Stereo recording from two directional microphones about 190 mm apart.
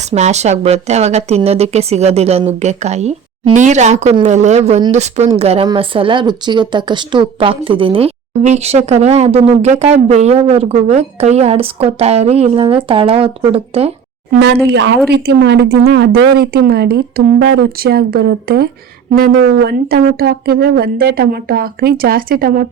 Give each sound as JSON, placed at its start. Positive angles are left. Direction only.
{"t": 0.1, "sound": "speech", "side_deg": -35}
{"t": 14.3, "sound": "speech", "side_deg": -60}